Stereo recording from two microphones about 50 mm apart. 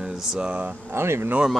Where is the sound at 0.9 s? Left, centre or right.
Right.